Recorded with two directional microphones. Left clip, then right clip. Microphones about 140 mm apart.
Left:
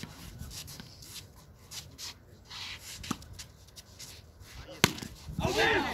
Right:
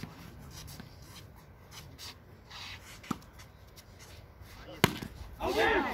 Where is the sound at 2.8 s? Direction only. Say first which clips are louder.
Left 5 dB; 25° left (ahead or behind).